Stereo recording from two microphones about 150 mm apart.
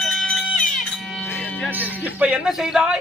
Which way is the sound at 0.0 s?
Centre (ahead or behind).